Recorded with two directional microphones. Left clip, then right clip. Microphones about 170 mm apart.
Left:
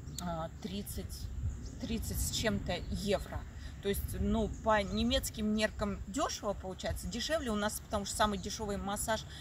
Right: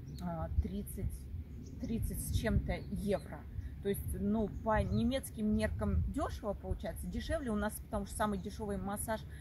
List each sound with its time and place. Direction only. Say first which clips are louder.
0.2 s speech: left 3 dB; centre (ahead or behind)
1.9 s speech: left 4 dB; centre (ahead or behind)